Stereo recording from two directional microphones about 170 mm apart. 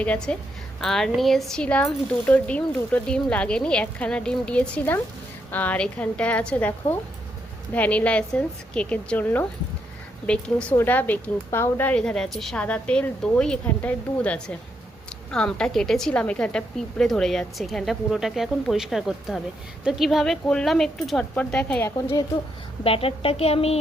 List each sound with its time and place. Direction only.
0.0 s speech: 5° left (ahead or behind)
22.8 s speech: 35° left (ahead or behind)